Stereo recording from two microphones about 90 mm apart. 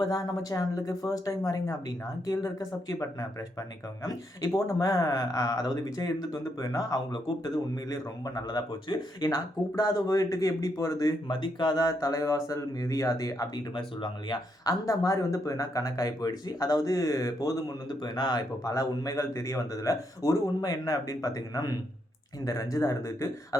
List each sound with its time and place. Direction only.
0.0 s speech: 45° left (ahead or behind)
11.3 s speech: 60° left (ahead or behind); by 13.5 s 40° left (ahead or behind)
13.7 s speech: 60° left (ahead or behind)
14.6 s speech: 40° left (ahead or behind)